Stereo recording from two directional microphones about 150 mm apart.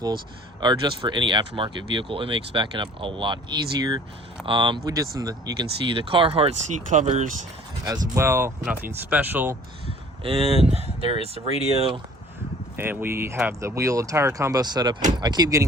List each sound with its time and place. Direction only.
0.6 s speech: 30° right (ahead or behind); by 7.3 s 50° right (ahead or behind)
7.9 s speech: 20° right (ahead or behind)
10.2 s speech: 40° right (ahead or behind)
11.2 s speech: 40° left (ahead or behind)
12.7 s speech: 15° right (ahead or behind)